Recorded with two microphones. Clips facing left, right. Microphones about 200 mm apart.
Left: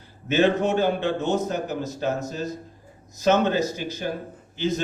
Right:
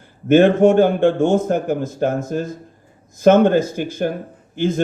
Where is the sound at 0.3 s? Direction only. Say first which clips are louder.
Right 9 dB; 50° right (ahead or behind).